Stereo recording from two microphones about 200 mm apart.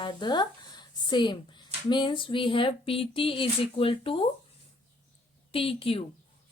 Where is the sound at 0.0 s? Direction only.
25° left (ahead or behind).